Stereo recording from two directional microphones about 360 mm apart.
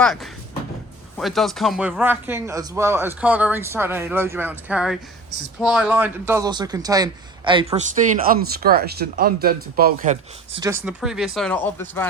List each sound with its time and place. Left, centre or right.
0.0 s a man's voice: centre